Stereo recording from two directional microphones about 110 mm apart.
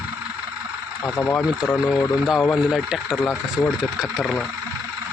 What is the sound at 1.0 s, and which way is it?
Speech, 15° left (ahead or behind).